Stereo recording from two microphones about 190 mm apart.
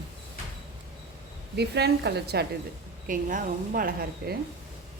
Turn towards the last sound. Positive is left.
turn(degrees=-50)  # may be behind; listen again after turning